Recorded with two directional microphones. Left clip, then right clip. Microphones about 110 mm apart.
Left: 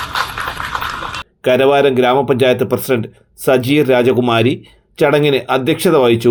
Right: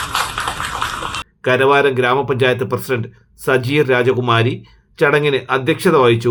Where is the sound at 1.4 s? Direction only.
35° left (ahead or behind).